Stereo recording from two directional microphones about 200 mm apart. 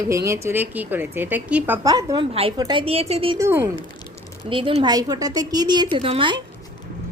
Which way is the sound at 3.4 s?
10° right (ahead or behind).